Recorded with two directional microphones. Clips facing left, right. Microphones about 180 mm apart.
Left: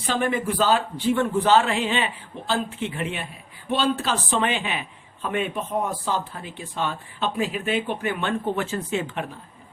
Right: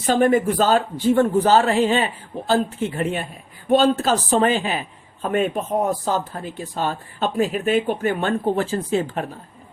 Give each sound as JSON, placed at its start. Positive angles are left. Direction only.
{"t": 0.0, "sound": "speech", "side_deg": -45}